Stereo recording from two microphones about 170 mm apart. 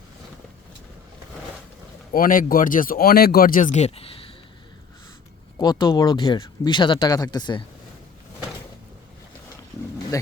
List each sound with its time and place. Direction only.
2.1 s speech: 55° left (ahead or behind); by 4.4 s 35° left (ahead or behind)
5.5 s speech: 25° left (ahead or behind)